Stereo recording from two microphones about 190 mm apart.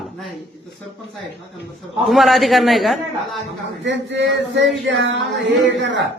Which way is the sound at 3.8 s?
70° right (ahead or behind).